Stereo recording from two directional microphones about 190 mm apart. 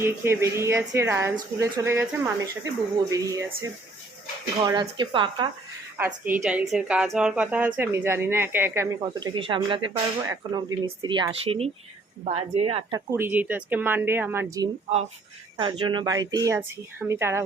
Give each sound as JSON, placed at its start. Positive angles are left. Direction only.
{"t": 0.0, "sound": "a woman's voice", "side_deg": -15}
{"t": 6.0, "sound": "a woman's voice", "side_deg": -10}
{"t": 9.3, "sound": "speech", "side_deg": -25}
{"t": 13.1, "sound": "a woman's voice", "side_deg": -10}
{"t": 15.5, "sound": "speech", "side_deg": -25}